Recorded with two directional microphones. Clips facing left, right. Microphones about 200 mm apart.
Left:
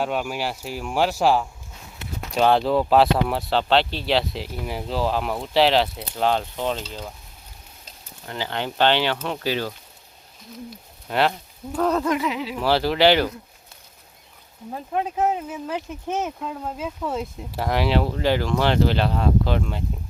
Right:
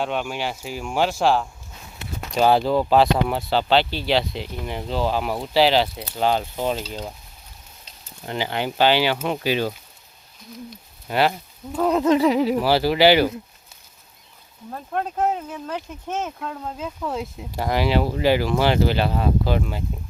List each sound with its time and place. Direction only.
0.0 s speech: 5° left (ahead or behind); by 7.1 s 10° right (ahead or behind)
8.3 s speech: 15° right (ahead or behind)
10.7 s speech: 5° right (ahead or behind)
12.0 s speech: 30° right (ahead or behind)
12.5 s speech: 5° right (ahead or behind)
14.7 s speech: 5° left (ahead or behind)